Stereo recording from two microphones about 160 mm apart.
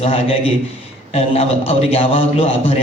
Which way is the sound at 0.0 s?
40° left (ahead or behind).